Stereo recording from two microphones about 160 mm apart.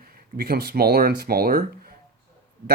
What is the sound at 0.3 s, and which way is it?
Speech, 70° right (ahead or behind).